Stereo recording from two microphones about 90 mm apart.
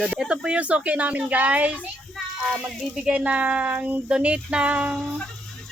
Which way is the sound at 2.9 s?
10° right (ahead or behind).